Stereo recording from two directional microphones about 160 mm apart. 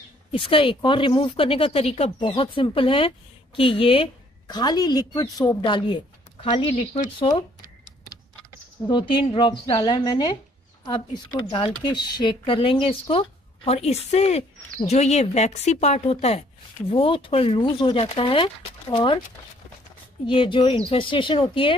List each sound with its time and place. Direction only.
0.3 s a woman's voice: 35° left (ahead or behind)
7.2 s a sound: 30° left (ahead or behind)
9.2 s a woman's voice: 35° left (ahead or behind)
11.3 s speech: 30° left (ahead or behind)
20.2 s speech: 30° left (ahead or behind)